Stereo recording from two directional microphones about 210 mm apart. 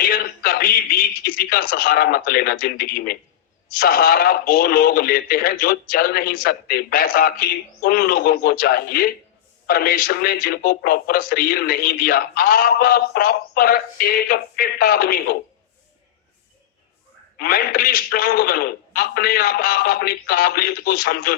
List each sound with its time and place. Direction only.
0.0 s speech: 45° left (ahead or behind)
17.3 s speech: 45° left (ahead or behind)